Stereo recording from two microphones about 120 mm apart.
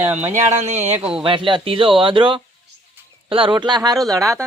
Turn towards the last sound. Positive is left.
turn(degrees=-30)  # may be behind; listen again after turning